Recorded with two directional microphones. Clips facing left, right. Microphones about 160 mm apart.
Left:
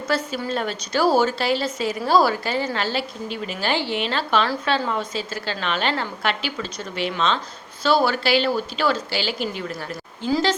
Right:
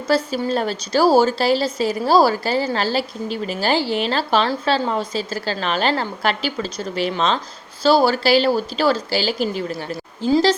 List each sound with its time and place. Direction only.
0.1 s a woman's voice: 35° right (ahead or behind)